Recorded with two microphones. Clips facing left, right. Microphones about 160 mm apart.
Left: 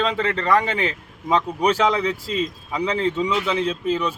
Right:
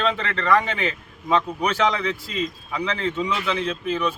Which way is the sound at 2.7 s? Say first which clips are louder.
Left 5 dB; 30° left (ahead or behind).